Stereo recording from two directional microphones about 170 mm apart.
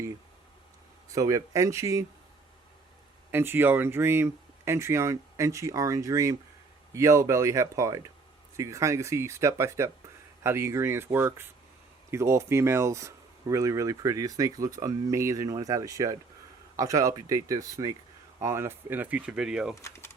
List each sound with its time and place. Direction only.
1.0 s speech: 20° right (ahead or behind)
3.3 s speech: 15° right (ahead or behind)
19.7 s speech: 15° left (ahead or behind)